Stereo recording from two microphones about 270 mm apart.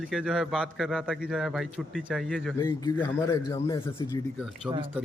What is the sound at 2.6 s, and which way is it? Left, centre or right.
A man's voice, centre.